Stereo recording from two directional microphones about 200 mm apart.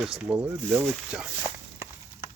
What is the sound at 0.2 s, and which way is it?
Speech, 5° right (ahead or behind).